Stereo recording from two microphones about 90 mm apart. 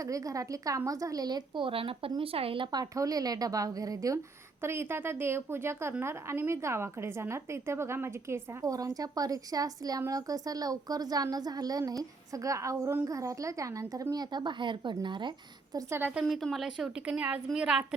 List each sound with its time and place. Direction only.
0.0 s a woman's voice: 40° right (ahead or behind); by 2.6 s 90° right
2.7 s a woman's voice: 40° right (ahead or behind)
4.6 s a woman's voice: 25° right (ahead or behind); by 15.3 s 60° right (ahead or behind)
15.9 s a woman's voice: 25° right (ahead or behind)
16.2 s a woman's voice: centre (ahead or behind)